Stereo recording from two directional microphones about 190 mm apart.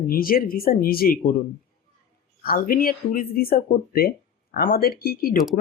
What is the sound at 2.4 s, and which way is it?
Speech, 50° left (ahead or behind).